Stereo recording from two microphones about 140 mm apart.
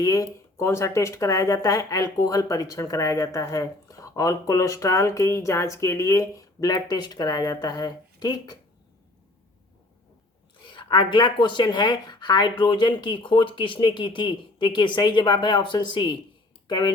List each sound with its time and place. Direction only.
0.0 s speech: 25° left (ahead or behind)
10.6 s speech: 35° left (ahead or behind)